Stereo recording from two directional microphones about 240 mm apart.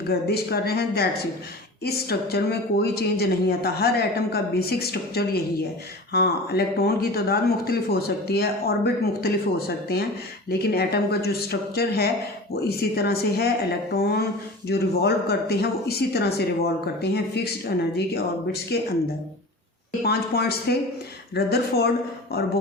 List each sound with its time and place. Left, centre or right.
0.1 s speech: left
20.1 s speech: left